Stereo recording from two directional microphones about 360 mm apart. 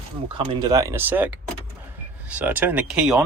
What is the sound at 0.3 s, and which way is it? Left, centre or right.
Speech, centre.